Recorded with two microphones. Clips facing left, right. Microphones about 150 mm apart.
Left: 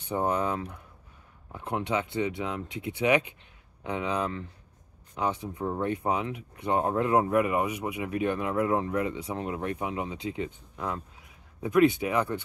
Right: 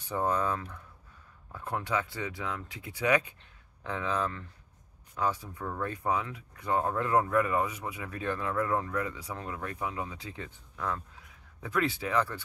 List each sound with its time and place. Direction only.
0.0 s speech: 20° left (ahead or behind)